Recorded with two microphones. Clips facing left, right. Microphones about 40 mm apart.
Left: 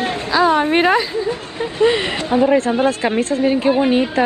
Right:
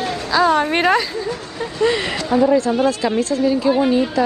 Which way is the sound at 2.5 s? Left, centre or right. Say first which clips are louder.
Left 1 dB; left.